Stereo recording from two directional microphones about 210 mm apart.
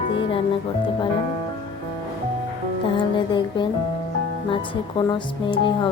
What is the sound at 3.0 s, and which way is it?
Speech, 20° left (ahead or behind).